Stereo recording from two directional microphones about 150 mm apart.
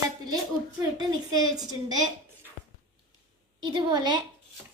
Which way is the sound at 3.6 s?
30° right (ahead or behind).